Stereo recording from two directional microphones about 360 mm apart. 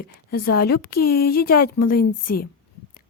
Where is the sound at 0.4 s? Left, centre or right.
Left.